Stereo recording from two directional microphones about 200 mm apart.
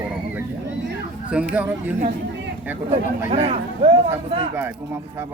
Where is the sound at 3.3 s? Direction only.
30° right (ahead or behind).